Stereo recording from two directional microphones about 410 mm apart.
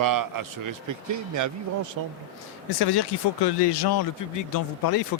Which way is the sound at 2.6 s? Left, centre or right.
Left.